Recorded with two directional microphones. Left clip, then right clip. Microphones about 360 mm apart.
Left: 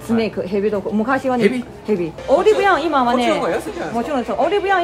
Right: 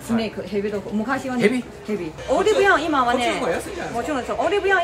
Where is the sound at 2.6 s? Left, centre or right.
Centre.